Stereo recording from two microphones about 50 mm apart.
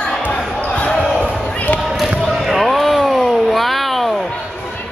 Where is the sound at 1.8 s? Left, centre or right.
Centre.